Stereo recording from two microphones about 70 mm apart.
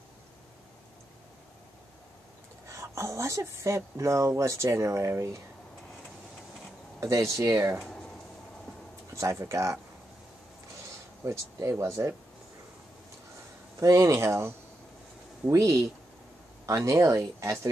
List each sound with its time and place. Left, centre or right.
2.7 s speech: right
7.0 s speech: right
7.8 s a sound: centre
9.1 s speech: right
11.2 s speech: right
13.7 s speech: right
15.5 s speech: right